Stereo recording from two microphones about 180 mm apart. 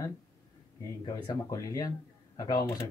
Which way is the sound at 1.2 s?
20° left (ahead or behind).